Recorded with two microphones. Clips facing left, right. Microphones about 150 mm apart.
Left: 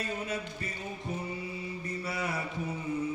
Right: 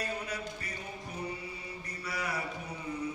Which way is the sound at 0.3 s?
25° left (ahead or behind).